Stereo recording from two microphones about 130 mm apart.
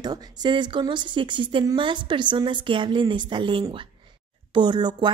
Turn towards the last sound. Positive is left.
turn(degrees=-35)  # may be behind; listen again after turning